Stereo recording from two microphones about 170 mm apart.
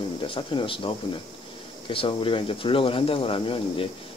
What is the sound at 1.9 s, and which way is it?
Speech, 30° left (ahead or behind).